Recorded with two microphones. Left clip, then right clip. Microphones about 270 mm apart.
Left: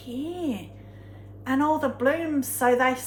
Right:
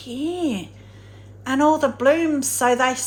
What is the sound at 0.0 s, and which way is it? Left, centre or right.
A woman's voice, right.